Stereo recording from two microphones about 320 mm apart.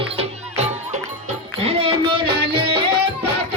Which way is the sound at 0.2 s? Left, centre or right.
Centre.